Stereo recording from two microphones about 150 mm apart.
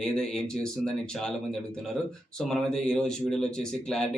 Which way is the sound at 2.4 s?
5° left (ahead or behind).